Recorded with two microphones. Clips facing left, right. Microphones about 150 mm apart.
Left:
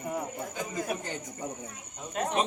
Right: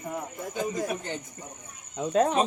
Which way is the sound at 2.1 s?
90° right.